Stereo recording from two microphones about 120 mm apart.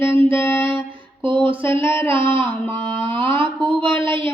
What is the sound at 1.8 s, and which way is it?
Music, 20° left (ahead or behind).